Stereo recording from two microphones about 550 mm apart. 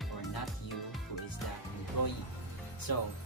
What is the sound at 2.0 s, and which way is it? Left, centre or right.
Speech, left.